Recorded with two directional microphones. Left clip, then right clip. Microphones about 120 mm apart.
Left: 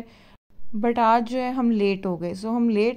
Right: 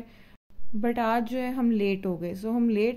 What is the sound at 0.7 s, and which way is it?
A woman's voice, 25° left (ahead or behind).